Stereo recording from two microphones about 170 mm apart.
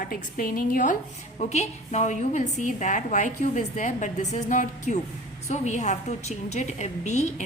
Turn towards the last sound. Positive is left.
turn(degrees=45)  # may be behind; listen again after turning